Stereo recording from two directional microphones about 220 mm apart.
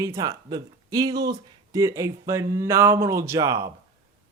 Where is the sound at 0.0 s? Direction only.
15° right (ahead or behind).